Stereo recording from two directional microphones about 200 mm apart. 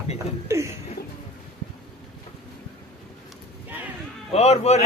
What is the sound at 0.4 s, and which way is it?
Chuckle, 15° right (ahead or behind).